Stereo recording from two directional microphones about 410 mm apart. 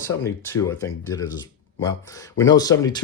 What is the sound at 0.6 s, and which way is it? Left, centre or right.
Speech, centre.